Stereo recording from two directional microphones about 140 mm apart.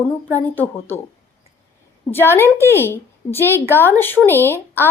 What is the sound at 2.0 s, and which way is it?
A woman's voice, 15° left (ahead or behind).